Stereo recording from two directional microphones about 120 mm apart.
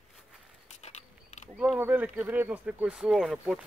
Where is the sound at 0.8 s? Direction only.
70° left (ahead or behind).